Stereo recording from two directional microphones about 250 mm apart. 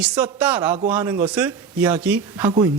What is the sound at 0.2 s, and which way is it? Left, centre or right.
A man's voice, centre.